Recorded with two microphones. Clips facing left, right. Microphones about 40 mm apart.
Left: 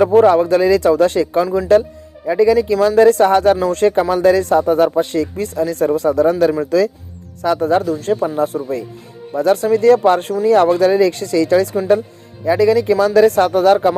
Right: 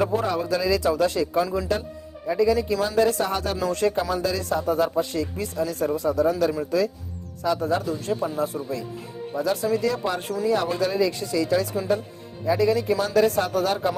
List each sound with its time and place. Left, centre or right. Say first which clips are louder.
0.2 s speech: left 13 dB; left
1.5 s speech: left 9 dB; left
2.2 s speech: left 8 dB; left
9.3 s speech: left 10 dB; left